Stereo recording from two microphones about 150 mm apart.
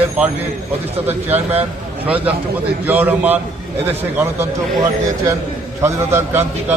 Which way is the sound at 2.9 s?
10° right (ahead or behind).